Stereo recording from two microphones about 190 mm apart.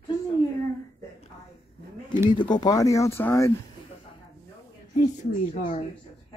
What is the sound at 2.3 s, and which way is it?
Speech, 25° left (ahead or behind).